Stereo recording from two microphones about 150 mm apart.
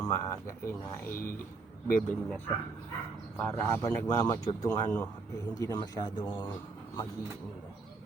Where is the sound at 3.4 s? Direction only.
10° left (ahead or behind).